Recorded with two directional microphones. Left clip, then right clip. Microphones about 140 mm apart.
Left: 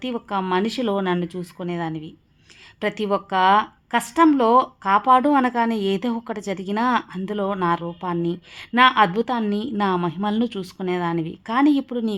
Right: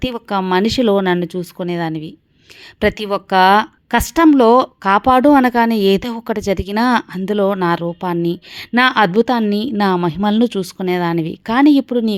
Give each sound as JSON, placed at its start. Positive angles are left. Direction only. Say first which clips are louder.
{"t": 0.0, "sound": "speech", "louder": "right 6 dB", "side_deg": -40}